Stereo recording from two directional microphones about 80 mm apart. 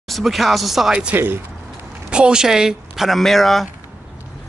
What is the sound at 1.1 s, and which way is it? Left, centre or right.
Speech, right.